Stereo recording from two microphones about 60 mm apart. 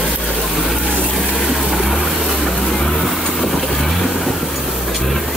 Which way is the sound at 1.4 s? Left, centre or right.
Centre.